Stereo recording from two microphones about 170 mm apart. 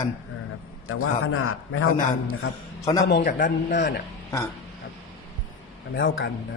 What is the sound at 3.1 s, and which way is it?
Speech, 50° left (ahead or behind).